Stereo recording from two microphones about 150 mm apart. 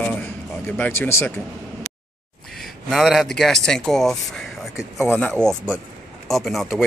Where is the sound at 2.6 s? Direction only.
Centre (ahead or behind).